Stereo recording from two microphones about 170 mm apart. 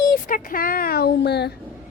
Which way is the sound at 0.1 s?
55° left (ahead or behind).